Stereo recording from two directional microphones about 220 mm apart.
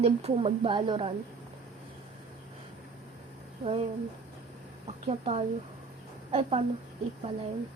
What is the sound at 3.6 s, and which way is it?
Speech, 25° right (ahead or behind).